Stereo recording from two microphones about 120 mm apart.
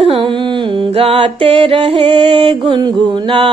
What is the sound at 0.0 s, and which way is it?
Carnatic music, 50° right (ahead or behind).